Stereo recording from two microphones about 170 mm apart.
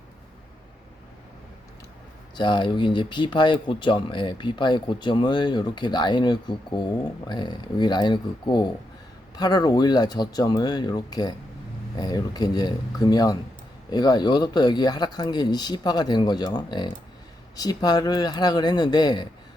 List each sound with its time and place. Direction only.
2.3 s speech: 25° left (ahead or behind)